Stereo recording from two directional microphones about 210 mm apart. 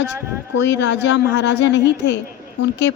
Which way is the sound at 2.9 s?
75° left (ahead or behind).